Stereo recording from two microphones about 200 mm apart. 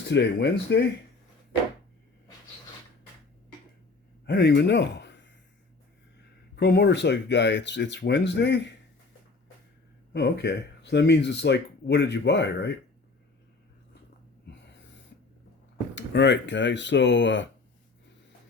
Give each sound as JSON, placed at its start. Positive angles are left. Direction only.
{"t": 0.0, "sound": "speech", "side_deg": 55}
{"t": 4.3, "sound": "speech", "side_deg": 55}
{"t": 6.6, "sound": "speech", "side_deg": 55}
{"t": 10.1, "sound": "speech", "side_deg": 55}
{"t": 14.4, "sound": "snort", "side_deg": 60}
{"t": 16.0, "sound": "speech", "side_deg": 60}